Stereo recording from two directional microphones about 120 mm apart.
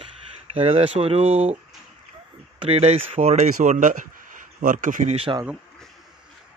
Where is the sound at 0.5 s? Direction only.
50° right (ahead or behind).